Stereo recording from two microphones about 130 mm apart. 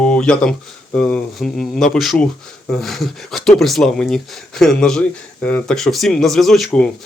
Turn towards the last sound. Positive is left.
turn(degrees=0)  # may be behind; listen again after turning